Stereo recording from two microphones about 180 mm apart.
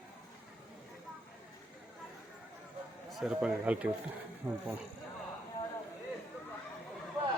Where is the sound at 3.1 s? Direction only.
Centre (ahead or behind).